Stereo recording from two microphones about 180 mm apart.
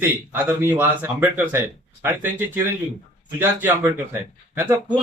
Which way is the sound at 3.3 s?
10° right (ahead or behind).